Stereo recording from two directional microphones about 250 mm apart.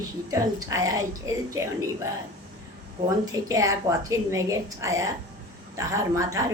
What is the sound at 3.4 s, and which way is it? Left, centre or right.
A woman's voice, centre.